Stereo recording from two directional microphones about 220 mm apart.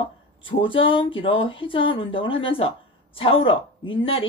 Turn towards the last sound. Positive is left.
turn(degrees=25)  # may be behind; listen again after turning